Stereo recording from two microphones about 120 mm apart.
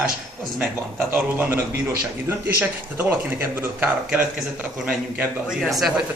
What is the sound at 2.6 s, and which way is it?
A man's voice, 15° right (ahead or behind).